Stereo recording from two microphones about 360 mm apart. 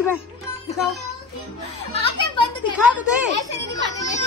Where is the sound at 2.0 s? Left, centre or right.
Centre.